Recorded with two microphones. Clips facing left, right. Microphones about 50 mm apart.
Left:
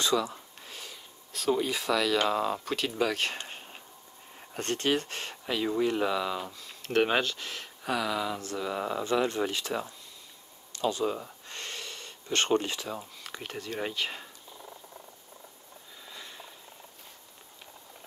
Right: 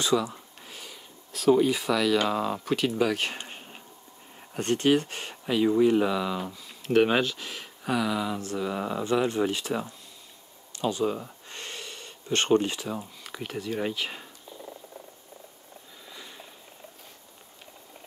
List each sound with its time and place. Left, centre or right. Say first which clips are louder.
0.0 s speech: right 2 dB; centre
11.1 s gasp: right 2 dB; centre
12.4 s speech: right 7 dB; centre
16.1 s a sound: even; centre